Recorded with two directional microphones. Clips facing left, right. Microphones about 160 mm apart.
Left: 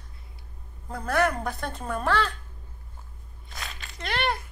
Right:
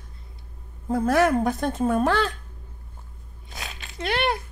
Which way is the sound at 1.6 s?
45° right (ahead or behind).